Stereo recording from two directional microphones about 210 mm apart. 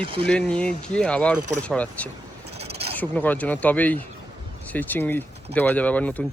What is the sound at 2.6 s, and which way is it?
Pulleys, 30° right (ahead or behind).